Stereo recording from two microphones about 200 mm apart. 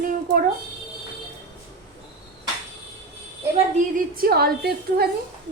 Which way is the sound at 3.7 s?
45° right (ahead or behind).